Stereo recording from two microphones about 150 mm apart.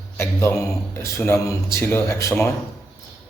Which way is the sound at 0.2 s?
20° left (ahead or behind).